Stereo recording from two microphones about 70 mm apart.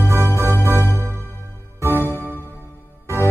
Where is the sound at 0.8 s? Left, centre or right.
Left.